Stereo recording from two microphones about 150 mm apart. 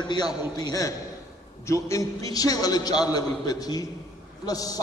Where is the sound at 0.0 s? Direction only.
30° left (ahead or behind).